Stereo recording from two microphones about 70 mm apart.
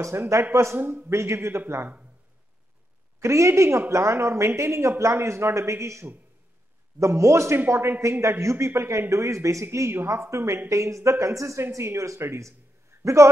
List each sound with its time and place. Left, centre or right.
0.0 s a man's voice: right
0.7 s a man's voice: right
1.1 s a man's voice: right
3.2 s a man's voice: right